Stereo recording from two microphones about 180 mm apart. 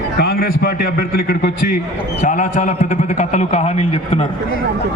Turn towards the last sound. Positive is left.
turn(degrees=35)  # may be behind; listen again after turning